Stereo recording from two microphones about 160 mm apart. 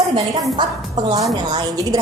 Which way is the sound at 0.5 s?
30° right (ahead or behind).